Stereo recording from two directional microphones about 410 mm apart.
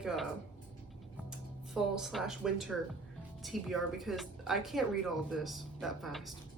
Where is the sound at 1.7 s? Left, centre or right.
Centre.